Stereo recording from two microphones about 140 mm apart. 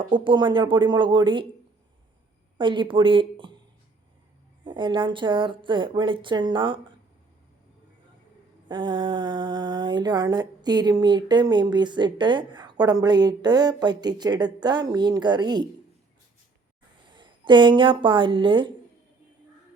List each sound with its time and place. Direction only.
0.1 s speech: 35° right (ahead or behind)
2.6 s speech: 35° right (ahead or behind)
4.6 s speech: 35° right (ahead or behind)
8.6 s speech: 35° right (ahead or behind)
17.1 s speech: 35° right (ahead or behind)